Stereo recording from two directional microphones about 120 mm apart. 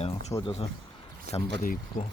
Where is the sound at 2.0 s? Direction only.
90° left.